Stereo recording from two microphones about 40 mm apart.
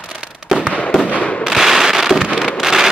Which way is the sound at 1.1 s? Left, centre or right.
Left.